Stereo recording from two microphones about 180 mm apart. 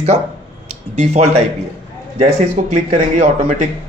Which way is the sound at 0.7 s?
40° right (ahead or behind).